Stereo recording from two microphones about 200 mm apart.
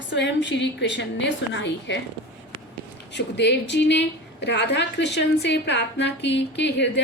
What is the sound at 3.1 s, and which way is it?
A woman's voice, 60° left (ahead or behind).